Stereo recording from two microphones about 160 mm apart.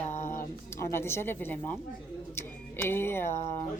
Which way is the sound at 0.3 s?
15° left (ahead or behind).